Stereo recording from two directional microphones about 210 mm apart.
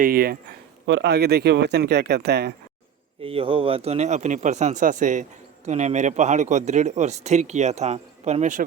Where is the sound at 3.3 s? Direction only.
25° right (ahead or behind).